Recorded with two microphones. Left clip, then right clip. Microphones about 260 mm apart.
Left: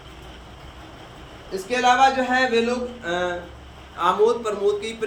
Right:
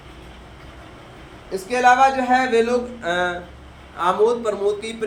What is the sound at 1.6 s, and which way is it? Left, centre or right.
Speech, centre.